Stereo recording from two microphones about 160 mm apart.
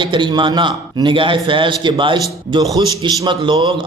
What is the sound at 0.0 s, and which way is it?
A man's voice, 30° right (ahead or behind).